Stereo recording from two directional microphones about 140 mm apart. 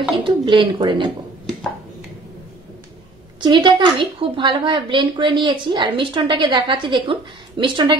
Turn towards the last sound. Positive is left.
turn(degrees=-35)  # may be behind; listen again after turning